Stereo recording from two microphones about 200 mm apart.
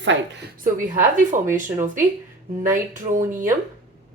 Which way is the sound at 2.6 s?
40° right (ahead or behind).